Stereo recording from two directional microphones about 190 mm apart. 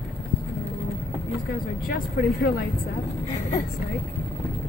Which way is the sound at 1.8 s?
50° left (ahead or behind).